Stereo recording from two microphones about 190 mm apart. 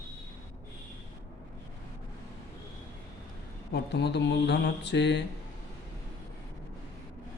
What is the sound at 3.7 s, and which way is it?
Speech, 65° left (ahead or behind).